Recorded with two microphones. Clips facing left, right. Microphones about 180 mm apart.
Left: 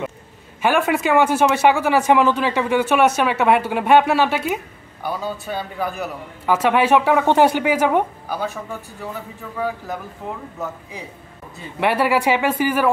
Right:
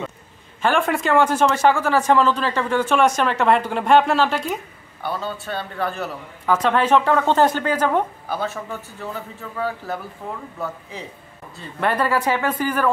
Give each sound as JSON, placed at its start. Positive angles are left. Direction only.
{"t": 0.6, "sound": "a man's voice", "side_deg": 5}
{"t": 9.9, "sound": "speech", "side_deg": 15}